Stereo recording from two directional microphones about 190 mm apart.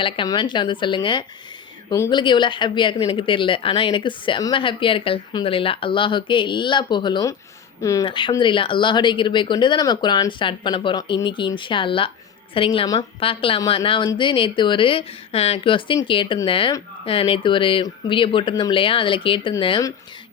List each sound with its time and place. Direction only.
0.0 s speech: 25° left (ahead or behind)